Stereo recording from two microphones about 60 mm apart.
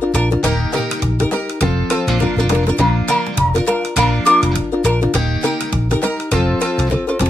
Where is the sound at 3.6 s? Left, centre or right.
Left.